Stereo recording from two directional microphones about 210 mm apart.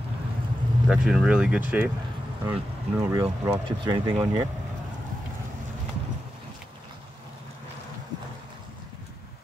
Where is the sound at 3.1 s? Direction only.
15° right (ahead or behind).